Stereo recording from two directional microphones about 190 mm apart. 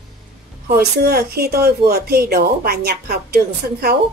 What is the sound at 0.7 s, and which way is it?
Speech, 55° right (ahead or behind).